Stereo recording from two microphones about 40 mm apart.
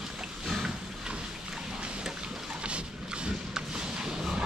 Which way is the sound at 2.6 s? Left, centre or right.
Right.